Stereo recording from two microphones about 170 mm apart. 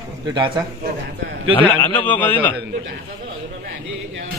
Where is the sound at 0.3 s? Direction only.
25° right (ahead or behind).